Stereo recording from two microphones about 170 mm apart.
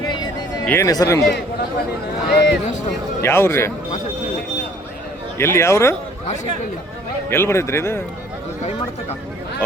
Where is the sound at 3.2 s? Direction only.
15° left (ahead or behind).